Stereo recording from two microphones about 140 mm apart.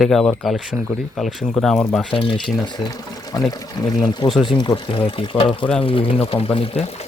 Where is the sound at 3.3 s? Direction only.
25° left (ahead or behind).